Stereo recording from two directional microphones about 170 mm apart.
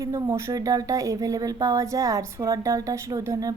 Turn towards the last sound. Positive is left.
turn(degrees=-20)  # may be behind; listen again after turning